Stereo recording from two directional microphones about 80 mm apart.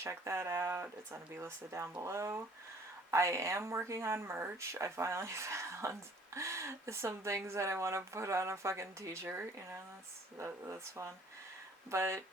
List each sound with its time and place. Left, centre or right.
0.0 s speech: right
9.2 s speech: right
9.6 s speech: right